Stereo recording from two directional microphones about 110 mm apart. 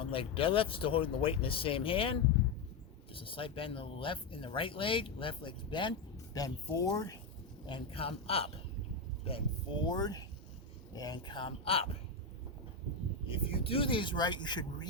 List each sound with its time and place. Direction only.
0.0 s speech: 55° left (ahead or behind)
6.3 s speech: 35° left (ahead or behind)
7.7 s a man's voice: 60° left (ahead or behind)
9.8 s speech: 40° left (ahead or behind); by 11.9 s 60° left (ahead or behind)
13.2 s speech: 55° left (ahead or behind)